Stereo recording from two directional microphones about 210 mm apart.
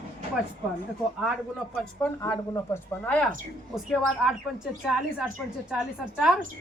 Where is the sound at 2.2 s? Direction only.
15° left (ahead or behind); by 4.3 s centre (ahead or behind).